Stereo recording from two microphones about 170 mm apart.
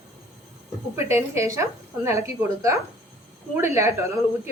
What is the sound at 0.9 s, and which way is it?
A woman's voice, 15° right (ahead or behind).